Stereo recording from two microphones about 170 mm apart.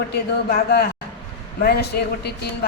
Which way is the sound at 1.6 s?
70° left (ahead or behind).